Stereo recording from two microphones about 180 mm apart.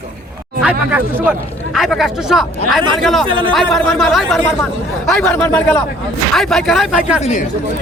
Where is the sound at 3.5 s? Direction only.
Centre (ahead or behind).